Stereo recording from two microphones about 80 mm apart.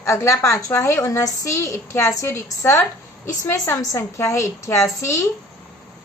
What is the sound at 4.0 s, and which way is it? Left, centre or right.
A woman's voice, left.